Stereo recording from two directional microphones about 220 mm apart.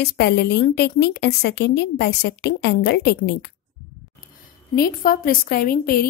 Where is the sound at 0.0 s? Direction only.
50° left (ahead or behind).